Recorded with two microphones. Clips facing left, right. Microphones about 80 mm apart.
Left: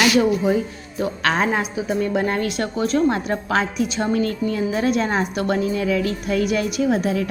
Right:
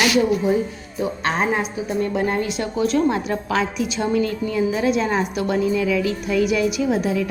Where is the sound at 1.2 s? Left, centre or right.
Left.